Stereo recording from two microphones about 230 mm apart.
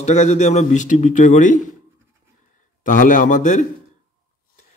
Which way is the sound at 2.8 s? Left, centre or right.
Left.